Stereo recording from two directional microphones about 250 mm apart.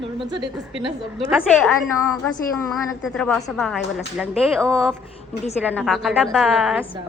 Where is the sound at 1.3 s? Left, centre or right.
Centre.